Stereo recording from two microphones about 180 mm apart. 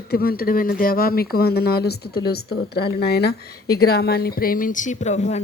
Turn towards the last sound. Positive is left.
turn(degrees=40)  # may be behind; listen again after turning